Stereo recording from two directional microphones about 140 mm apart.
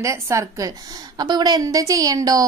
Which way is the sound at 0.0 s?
20° right (ahead or behind).